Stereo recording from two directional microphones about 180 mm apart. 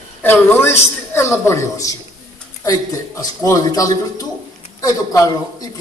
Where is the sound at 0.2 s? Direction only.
10° left (ahead or behind).